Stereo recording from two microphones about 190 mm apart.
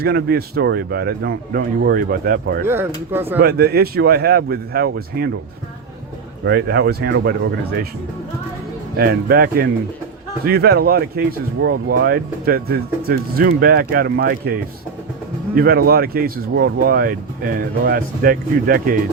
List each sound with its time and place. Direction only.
0.0 s speech: 55° right (ahead or behind)
2.6 s speech: 10° right (ahead or behind)
3.4 s speech: 55° right (ahead or behind)
6.4 s speech: 60° right (ahead or behind)
9.0 s speech: 55° right (ahead or behind)
15.5 s speech: 55° right (ahead or behind)